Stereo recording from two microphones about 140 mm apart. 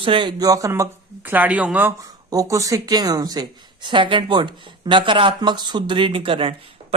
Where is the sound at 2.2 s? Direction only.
25° right (ahead or behind).